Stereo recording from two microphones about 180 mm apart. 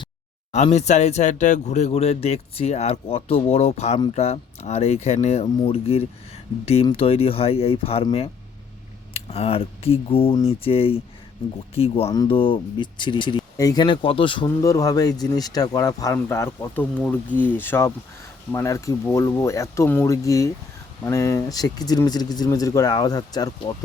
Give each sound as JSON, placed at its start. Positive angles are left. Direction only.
{"t": 0.5, "sound": "speech", "side_deg": 40}
{"t": 14.6, "sound": "speech", "side_deg": 20}